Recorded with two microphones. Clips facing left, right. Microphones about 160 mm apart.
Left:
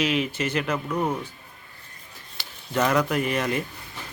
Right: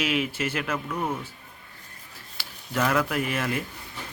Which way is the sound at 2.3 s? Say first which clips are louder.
Left 3 dB; 5° right (ahead or behind).